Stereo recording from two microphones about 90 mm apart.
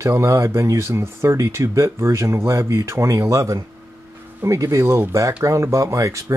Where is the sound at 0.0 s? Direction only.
30° right (ahead or behind).